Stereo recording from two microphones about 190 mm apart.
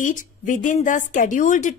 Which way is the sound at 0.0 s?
45° left (ahead or behind).